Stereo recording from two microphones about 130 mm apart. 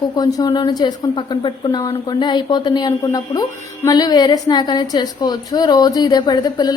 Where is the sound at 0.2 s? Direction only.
30° left (ahead or behind).